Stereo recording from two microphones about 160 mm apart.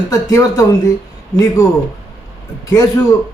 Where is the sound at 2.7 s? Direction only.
20° left (ahead or behind).